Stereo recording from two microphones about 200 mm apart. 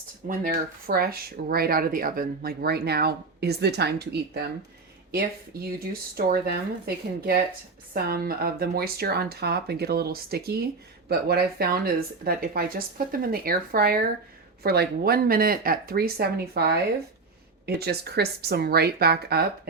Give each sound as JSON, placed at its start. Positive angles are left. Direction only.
{"t": 0.3, "sound": "speech", "side_deg": -45}
{"t": 5.6, "sound": "speech", "side_deg": -50}